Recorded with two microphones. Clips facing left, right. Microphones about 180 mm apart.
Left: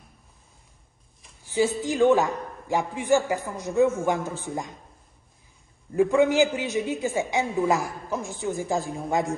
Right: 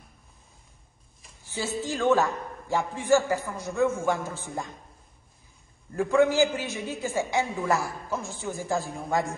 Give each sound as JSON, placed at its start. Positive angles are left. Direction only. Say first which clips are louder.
{"t": 1.4, "sound": "a man's voice", "louder": "left 7 dB", "side_deg": 15}
{"t": 5.9, "sound": "a man's voice", "louder": "left 2 dB", "side_deg": 15}